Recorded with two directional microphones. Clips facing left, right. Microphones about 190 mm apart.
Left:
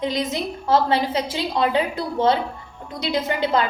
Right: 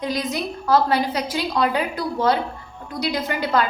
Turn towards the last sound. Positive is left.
turn(degrees=25)  # may be behind; listen again after turning